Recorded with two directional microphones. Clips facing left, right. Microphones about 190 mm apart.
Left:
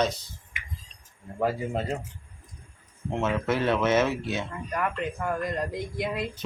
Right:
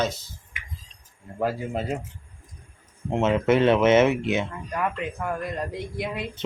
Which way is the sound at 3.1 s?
20° right (ahead or behind).